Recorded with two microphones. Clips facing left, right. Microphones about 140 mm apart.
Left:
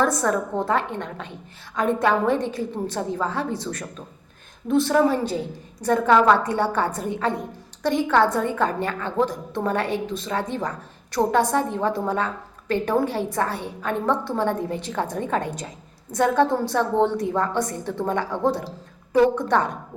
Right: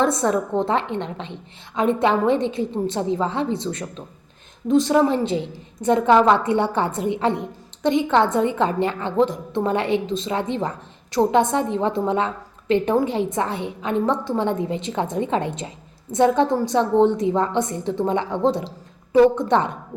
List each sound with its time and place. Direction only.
0.0 s a woman's voice: 25° right (ahead or behind)